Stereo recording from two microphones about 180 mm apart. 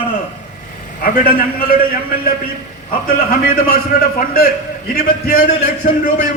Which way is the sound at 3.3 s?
60° left (ahead or behind).